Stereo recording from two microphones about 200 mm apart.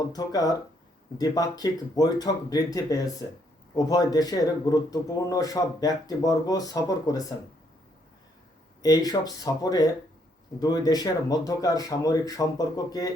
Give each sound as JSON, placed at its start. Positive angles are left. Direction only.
{"t": 0.1, "sound": "a man's voice", "side_deg": 20}
{"t": 9.0, "sound": "a man's voice", "side_deg": 20}